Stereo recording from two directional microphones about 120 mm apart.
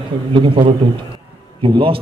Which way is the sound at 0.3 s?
45° right (ahead or behind).